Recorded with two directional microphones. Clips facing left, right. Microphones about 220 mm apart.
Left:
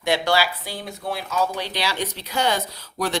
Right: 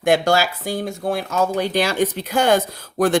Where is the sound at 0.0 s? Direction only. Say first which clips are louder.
Right 5 dB; 45° right (ahead or behind).